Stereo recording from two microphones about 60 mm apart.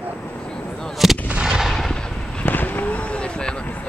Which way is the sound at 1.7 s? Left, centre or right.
Centre.